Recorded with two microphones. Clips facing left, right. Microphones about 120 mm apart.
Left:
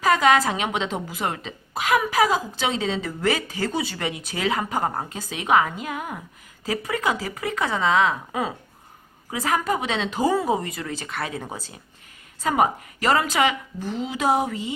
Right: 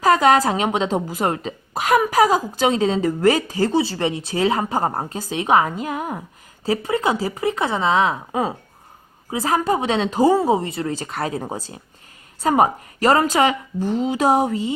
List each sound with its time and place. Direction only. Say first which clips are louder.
0.0 s a woman's voice: right 3 dB; 35° right (ahead or behind)